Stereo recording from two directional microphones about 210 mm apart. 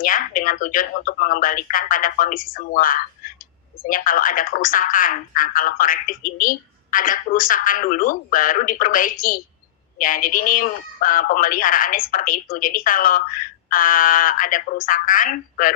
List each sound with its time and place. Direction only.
0.0 s a woman's voice: 40° left (ahead or behind)